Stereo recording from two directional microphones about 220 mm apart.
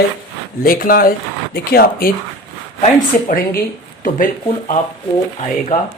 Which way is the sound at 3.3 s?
40° left (ahead or behind).